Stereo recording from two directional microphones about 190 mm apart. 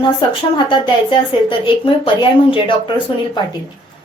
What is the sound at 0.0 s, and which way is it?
A woman's voice, 25° left (ahead or behind).